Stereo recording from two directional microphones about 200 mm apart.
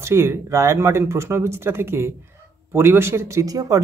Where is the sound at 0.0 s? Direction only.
15° right (ahead or behind).